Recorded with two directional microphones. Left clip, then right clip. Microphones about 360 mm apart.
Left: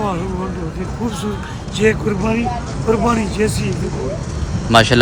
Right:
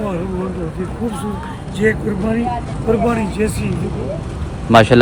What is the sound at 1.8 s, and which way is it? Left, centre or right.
Speech, centre.